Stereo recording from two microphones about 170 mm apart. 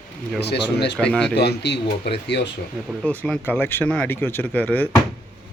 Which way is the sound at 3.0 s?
5° left (ahead or behind).